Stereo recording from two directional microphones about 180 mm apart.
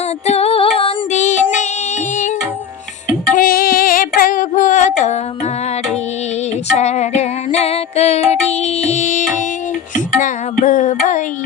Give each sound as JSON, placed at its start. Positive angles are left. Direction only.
{"t": 0.3, "sound": "music", "side_deg": 35}
{"t": 3.3, "sound": "female singing", "side_deg": 50}
{"t": 6.7, "sound": "music", "side_deg": 40}